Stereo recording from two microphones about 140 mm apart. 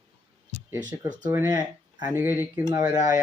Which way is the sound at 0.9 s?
20° right (ahead or behind).